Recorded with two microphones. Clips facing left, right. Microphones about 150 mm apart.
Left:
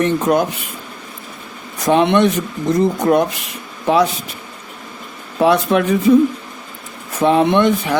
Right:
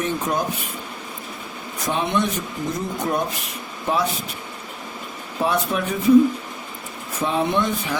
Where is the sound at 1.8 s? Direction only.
75° left (ahead or behind).